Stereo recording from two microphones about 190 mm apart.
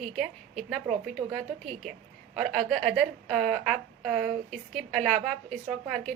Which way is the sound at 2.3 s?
Centre (ahead or behind).